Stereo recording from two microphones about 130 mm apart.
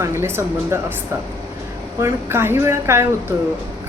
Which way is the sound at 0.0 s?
20° right (ahead or behind).